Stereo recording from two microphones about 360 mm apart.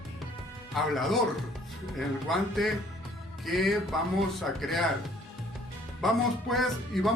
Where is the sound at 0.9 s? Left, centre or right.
Centre.